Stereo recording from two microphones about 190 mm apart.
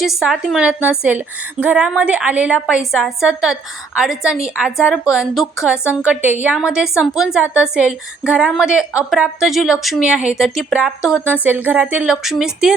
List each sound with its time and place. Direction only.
0.0 s a woman's voice: centre (ahead or behind)
5.8 s a woman's voice: 10° left (ahead or behind)
6.1 s a woman's voice: 10° right (ahead or behind)